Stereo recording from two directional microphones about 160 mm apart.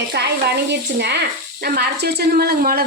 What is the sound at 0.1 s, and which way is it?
Speech, 90° right.